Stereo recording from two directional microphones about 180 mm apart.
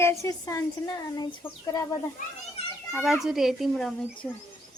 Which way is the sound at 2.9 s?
Centre (ahead or behind).